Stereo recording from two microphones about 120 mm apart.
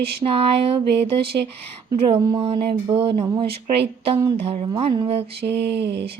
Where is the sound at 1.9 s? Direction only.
45° right (ahead or behind).